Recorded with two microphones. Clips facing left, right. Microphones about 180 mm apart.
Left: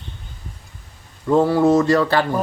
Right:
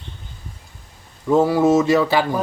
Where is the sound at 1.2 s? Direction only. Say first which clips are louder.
Even; 5° right (ahead or behind).